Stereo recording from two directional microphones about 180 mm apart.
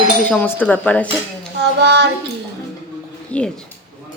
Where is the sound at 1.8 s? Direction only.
70° right (ahead or behind).